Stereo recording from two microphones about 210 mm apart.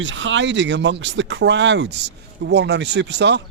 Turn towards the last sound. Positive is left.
turn(degrees=-55)  # may be behind; listen again after turning